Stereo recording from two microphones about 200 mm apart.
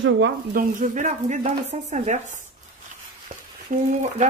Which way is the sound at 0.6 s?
40° right (ahead or behind).